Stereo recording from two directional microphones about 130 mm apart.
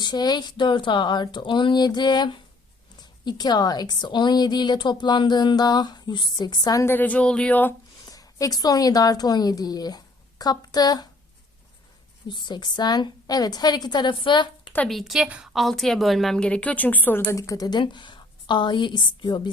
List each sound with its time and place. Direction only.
0.0 s speech: 35° left (ahead or behind)
6.8 s a woman's voice: 15° left (ahead or behind)
8.0 s a woman's voice: 25° left (ahead or behind)
12.3 s speech: 35° left (ahead or behind)
14.8 s a woman's voice: centre (ahead or behind); by 19.4 s 35° left (ahead or behind)